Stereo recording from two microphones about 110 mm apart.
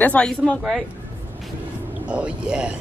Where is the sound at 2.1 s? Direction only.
10° right (ahead or behind).